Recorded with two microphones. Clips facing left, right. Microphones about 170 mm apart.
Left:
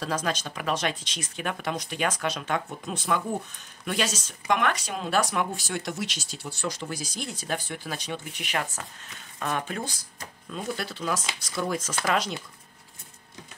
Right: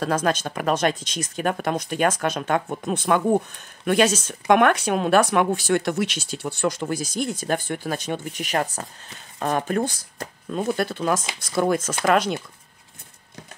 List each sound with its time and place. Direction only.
0.0 s speech: 50° right (ahead or behind)